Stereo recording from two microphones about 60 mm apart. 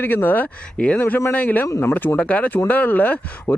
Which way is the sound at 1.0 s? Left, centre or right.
Left.